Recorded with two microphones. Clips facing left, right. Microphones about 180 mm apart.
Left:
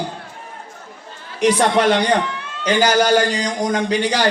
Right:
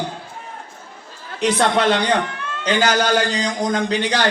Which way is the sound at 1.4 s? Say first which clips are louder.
Left 2 dB; 10° left (ahead or behind).